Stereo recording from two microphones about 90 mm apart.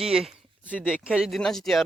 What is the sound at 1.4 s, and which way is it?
Speech, 5° left (ahead or behind).